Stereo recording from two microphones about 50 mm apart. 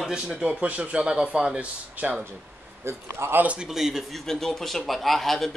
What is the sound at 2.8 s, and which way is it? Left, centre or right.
Speech, right.